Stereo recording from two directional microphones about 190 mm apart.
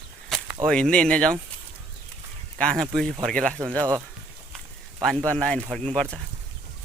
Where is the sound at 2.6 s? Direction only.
5° left (ahead or behind).